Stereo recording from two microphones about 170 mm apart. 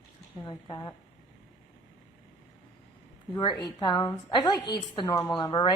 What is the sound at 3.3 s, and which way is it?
A woman's voice, 25° left (ahead or behind).